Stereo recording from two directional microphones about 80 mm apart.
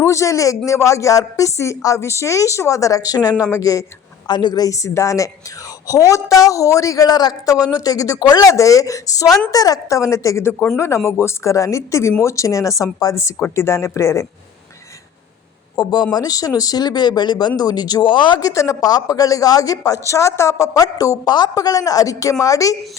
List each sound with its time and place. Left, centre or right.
0.0 s a woman's voice: left
4.3 s a woman's voice: left
15.7 s speech: left
18.3 s a woman's voice: left
20.8 s a woman's voice: left